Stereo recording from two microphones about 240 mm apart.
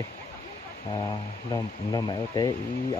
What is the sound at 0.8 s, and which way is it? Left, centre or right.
Speech, centre.